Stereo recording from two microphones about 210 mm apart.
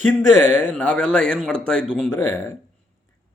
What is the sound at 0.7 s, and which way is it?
Speech, 5° left (ahead or behind).